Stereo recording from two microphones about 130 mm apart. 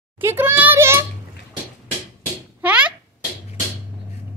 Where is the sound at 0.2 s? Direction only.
20° right (ahead or behind).